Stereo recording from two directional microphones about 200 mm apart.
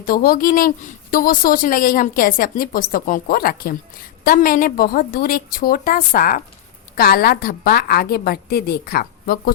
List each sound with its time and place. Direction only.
0.0 s a woman's voice: 45° left (ahead or behind)